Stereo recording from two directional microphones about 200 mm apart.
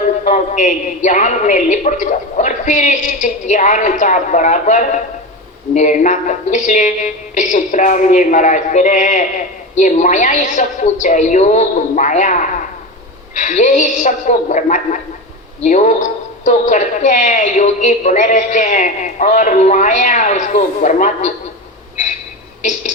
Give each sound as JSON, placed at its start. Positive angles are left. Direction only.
{"t": 0.3, "sound": "a man's voice", "side_deg": 40}